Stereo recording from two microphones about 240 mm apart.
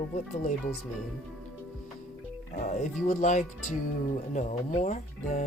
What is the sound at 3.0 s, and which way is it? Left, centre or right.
Speech, left.